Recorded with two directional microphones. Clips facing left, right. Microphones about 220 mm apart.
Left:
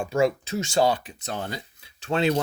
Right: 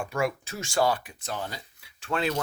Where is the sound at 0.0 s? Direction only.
25° left (ahead or behind).